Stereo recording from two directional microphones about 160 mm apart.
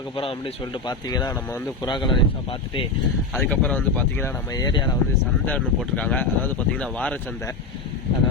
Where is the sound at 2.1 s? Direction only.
30° left (ahead or behind).